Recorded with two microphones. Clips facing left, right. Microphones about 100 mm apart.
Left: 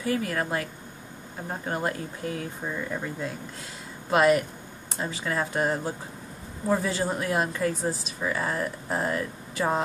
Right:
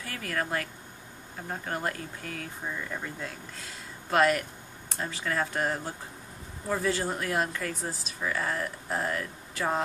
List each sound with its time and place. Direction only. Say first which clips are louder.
0.0 s speech: left 6 dB; 25° left (ahead or behind)